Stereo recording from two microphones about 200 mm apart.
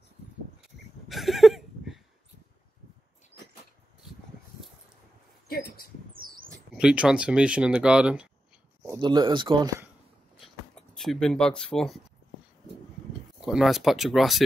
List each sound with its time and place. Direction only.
0.6 s a sound: centre (ahead or behind)
6.1 s a sound: 45° right (ahead or behind)
6.8 s speech: 5° right (ahead or behind)
8.8 s speech: 20° right (ahead or behind)
11.0 s speech: centre (ahead or behind)
13.4 s speech: 5° right (ahead or behind)